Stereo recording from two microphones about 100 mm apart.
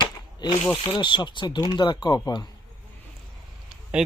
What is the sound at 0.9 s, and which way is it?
Speech, 50° left (ahead or behind).